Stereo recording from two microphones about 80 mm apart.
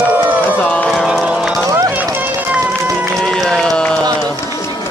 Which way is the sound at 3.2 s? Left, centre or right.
Centre.